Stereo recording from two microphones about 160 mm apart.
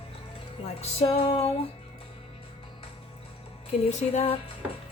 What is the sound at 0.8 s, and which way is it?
Music, 40° left (ahead or behind).